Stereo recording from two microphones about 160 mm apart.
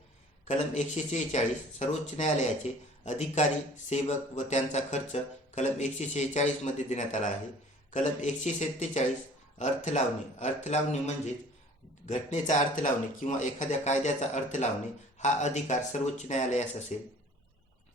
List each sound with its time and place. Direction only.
0.4 s speech: 50° left (ahead or behind)